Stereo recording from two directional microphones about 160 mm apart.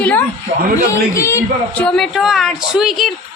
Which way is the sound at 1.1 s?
20° left (ahead or behind).